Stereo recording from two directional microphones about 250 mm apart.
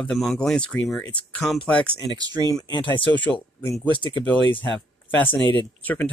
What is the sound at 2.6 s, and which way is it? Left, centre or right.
Speech, centre.